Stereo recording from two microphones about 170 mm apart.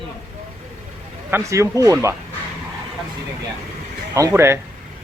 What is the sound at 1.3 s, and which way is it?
Speech, 15° right (ahead or behind).